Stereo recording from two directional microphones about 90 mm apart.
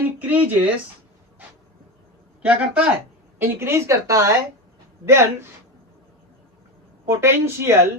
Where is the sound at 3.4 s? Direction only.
30° right (ahead or behind).